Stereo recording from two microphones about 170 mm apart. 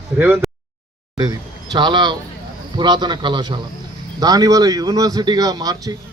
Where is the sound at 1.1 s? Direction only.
25° right (ahead or behind).